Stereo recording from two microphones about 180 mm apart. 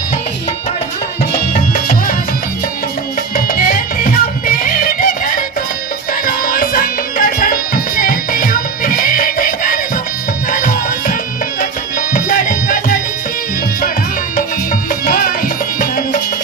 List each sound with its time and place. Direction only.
1.7 s music: 50° left (ahead or behind)
3.3 s music: 50° left (ahead or behind)
14.3 s music: 50° left (ahead or behind)